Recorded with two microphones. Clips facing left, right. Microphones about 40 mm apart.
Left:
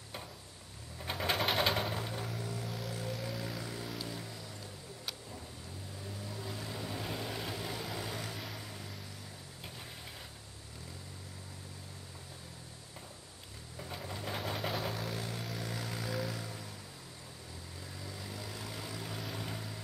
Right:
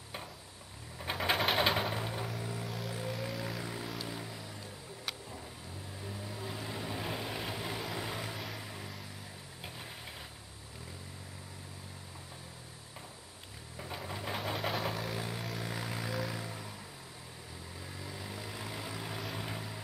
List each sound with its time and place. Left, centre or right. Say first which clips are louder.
0.9 s sewing machine: right 2 dB; centre
2.7 s vehicle: right 1 dB; centre
3.1 s music: right 2 dB; centre
3.6 s vehicle: right 1 dB; centre
6.0 s vehicle: right 2 dB; centre
13.7 s vehicle: right 2 dB; centre
16.2 s music: right 1 dB; centre
17.9 s vehicle: right 1 dB; centre